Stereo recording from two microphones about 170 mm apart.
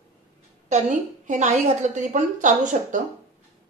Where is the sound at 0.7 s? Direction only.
45° right (ahead or behind).